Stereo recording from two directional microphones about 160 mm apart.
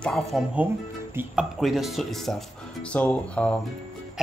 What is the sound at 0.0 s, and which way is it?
Speech, centre (ahead or behind).